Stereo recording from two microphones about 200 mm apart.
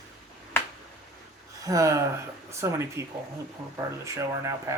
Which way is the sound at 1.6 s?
15° right (ahead or behind).